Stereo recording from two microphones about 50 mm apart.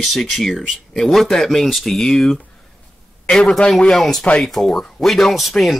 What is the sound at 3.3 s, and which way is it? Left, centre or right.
Speech, left.